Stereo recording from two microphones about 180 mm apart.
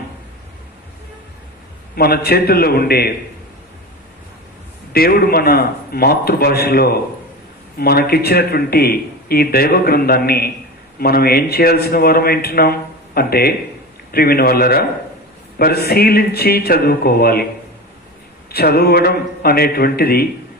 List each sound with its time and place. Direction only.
2.0 s speech: 60° left (ahead or behind)
4.9 s speech: 55° left (ahead or behind)
18.5 s speech: 60° left (ahead or behind)